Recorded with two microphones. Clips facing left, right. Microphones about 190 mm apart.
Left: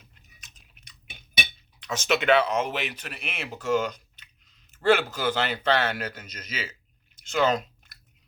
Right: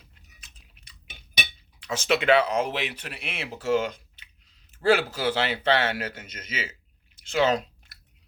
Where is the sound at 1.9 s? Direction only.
30° right (ahead or behind).